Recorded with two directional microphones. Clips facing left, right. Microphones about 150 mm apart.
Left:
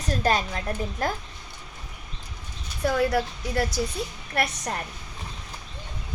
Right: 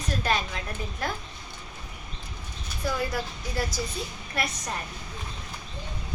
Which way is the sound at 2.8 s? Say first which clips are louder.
Left 6 dB; 65° left (ahead or behind).